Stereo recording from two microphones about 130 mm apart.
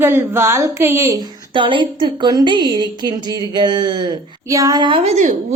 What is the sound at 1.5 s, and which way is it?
A woman's voice, 40° right (ahead or behind).